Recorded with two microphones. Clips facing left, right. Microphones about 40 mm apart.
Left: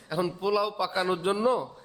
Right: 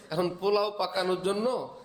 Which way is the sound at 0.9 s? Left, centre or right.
Centre.